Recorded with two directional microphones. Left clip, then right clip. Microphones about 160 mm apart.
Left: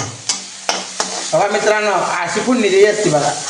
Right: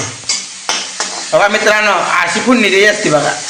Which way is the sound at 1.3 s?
Centre (ahead or behind).